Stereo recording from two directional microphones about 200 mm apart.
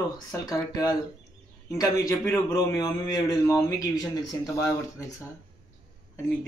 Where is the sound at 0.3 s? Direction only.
15° left (ahead or behind).